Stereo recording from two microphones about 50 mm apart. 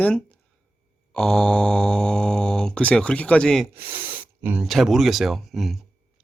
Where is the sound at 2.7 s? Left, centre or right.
Left.